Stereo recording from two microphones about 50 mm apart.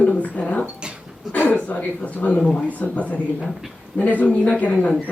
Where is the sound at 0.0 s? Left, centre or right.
Left.